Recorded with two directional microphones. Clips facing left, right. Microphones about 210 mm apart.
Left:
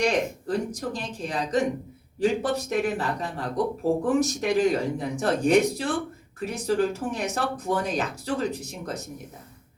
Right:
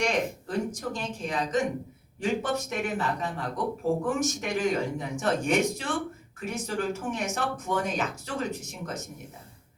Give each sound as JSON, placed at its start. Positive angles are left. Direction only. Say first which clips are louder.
{"t": 0.0, "sound": "speech", "louder": "left 3 dB", "side_deg": 35}